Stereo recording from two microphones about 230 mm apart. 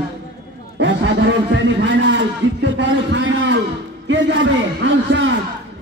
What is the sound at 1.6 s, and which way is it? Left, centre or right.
A man's voice, right.